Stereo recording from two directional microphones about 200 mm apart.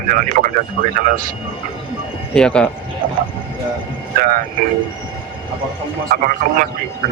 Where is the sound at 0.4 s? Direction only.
50° right (ahead or behind).